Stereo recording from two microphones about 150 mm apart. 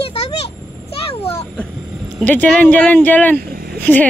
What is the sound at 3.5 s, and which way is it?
Vehicle, 90° right.